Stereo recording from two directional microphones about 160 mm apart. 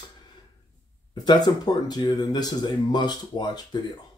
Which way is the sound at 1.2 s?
25° left (ahead or behind).